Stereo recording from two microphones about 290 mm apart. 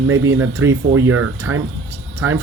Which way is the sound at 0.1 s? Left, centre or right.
Right.